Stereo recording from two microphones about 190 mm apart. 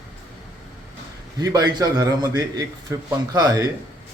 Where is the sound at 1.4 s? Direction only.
20° right (ahead or behind).